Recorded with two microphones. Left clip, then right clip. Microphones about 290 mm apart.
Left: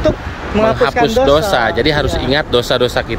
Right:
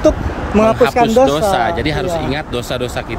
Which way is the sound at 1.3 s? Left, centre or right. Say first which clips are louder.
Left 2 dB; centre.